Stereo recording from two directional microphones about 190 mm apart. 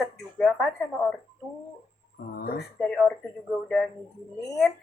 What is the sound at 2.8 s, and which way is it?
Speech, centre (ahead or behind).